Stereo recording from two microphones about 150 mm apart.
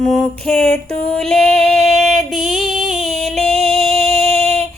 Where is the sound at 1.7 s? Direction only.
Centre (ahead or behind).